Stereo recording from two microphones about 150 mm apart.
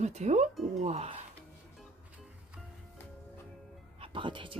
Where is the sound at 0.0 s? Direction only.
50° right (ahead or behind).